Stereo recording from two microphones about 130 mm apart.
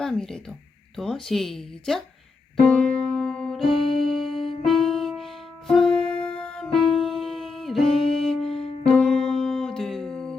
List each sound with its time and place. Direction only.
0.0 s speech: 5° left (ahead or behind)
2.6 s music: 5° left (ahead or behind)
4.3 s music: 45° left (ahead or behind)
4.6 s music: 5° left (ahead or behind)
8.4 s music: 45° left (ahead or behind)
8.8 s music: 5° left (ahead or behind)